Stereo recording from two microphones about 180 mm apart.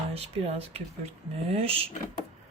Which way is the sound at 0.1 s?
35° right (ahead or behind).